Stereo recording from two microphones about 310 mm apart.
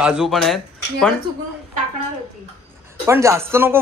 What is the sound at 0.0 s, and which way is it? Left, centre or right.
Speech, centre.